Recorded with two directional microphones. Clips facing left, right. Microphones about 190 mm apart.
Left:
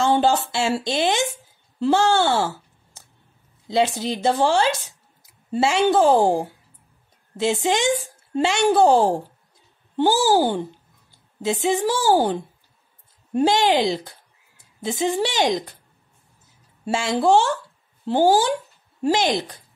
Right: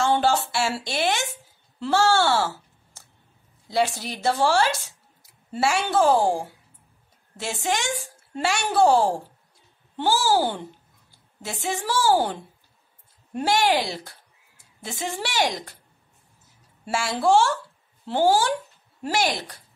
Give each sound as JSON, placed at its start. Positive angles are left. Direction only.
{"t": 0.0, "sound": "speech", "side_deg": 20}
{"t": 13.4, "sound": "speech", "side_deg": 20}
{"t": 16.8, "sound": "speech", "side_deg": 20}